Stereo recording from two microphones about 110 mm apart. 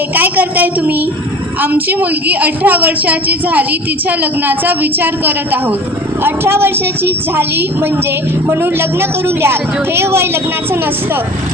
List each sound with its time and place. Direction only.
0.1 s a woman's voice: 15° right (ahead or behind)